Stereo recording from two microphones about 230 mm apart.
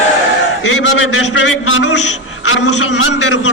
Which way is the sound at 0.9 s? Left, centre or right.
Left.